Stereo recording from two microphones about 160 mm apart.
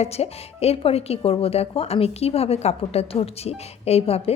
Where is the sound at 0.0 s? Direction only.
40° left (ahead or behind).